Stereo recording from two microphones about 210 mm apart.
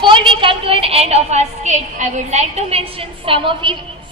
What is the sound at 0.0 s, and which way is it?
A woman's voice, 25° right (ahead or behind).